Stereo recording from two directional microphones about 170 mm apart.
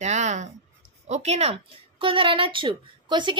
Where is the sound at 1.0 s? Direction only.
40° right (ahead or behind).